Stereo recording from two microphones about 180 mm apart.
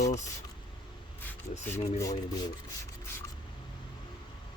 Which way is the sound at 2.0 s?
20° left (ahead or behind).